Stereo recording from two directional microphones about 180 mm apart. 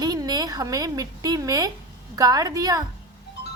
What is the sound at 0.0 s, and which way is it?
A woman's voice, 20° right (ahead or behind).